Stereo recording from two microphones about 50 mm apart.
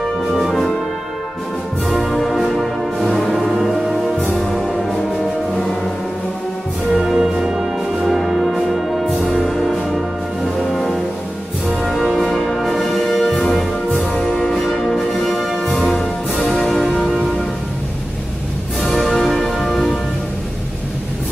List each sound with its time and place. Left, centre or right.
0.0 s music: centre
1.9 s music: centre
4.4 s music: centre
6.9 s music: centre
13.9 s music: centre
14.3 s music: centre
18.8 s music: centre